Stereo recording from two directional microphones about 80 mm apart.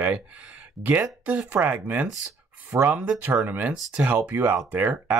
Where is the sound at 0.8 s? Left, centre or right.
Right.